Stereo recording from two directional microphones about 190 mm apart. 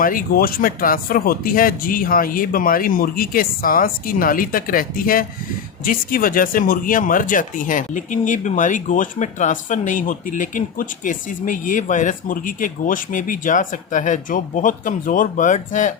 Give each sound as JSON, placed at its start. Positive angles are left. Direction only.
{"t": 0.0, "sound": "speech", "side_deg": 45}